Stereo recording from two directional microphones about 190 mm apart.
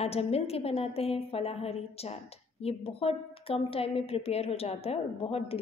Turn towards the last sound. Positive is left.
turn(degrees=30)  # may be behind; listen again after turning